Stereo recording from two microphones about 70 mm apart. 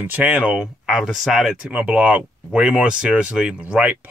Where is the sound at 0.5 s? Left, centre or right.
Centre.